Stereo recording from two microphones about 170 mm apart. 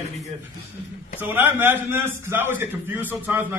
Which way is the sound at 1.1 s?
10° right (ahead or behind).